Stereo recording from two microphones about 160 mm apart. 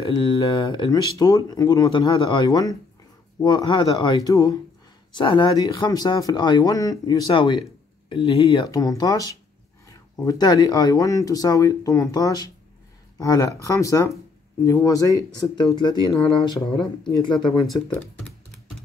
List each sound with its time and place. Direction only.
0.0 s speech: 30° left (ahead or behind)
8.6 s speech: 25° left (ahead or behind)